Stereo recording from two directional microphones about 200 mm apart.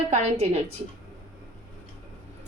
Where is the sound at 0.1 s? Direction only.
35° right (ahead or behind).